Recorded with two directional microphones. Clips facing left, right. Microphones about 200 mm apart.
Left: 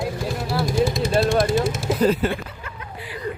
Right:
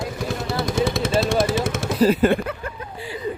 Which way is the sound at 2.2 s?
50° right (ahead or behind).